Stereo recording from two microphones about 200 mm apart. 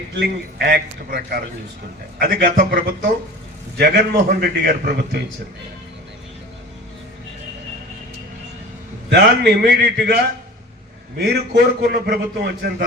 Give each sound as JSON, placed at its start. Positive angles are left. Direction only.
{"t": 0.2, "sound": "a man's voice", "side_deg": -55}
{"t": 9.0, "sound": "a man's voice", "side_deg": -55}
{"t": 11.2, "sound": "a man's voice", "side_deg": -50}